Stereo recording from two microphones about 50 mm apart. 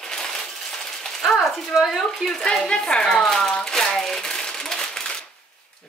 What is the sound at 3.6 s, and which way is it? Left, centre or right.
Crumpling, centre.